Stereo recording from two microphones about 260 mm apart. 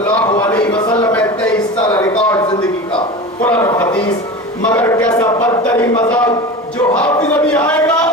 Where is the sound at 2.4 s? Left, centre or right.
Centre.